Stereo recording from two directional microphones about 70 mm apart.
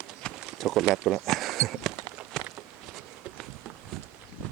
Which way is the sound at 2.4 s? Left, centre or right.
Centre.